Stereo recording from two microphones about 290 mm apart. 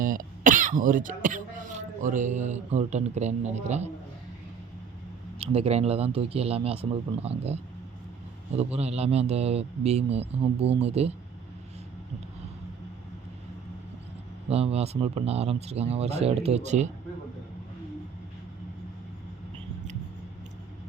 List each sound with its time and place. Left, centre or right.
0.0 s speech: right
5.4 s speech: right
14.5 s speech: right